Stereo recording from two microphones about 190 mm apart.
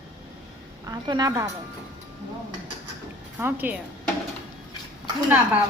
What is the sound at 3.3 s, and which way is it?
Speech, 10° right (ahead or behind).